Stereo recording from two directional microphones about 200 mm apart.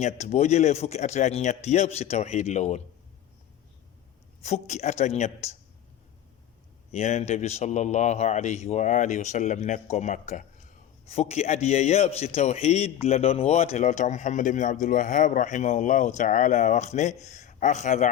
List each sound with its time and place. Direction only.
0.0 s a man's voice: 35° left (ahead or behind)
4.4 s a man's voice: 35° left (ahead or behind)
6.9 s a man's voice: 35° left (ahead or behind)